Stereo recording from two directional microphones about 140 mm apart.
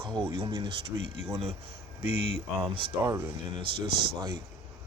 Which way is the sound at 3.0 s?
20° right (ahead or behind).